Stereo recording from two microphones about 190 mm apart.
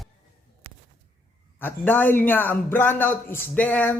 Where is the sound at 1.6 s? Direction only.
10° left (ahead or behind).